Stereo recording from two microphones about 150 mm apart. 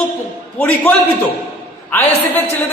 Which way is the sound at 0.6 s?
15° left (ahead or behind).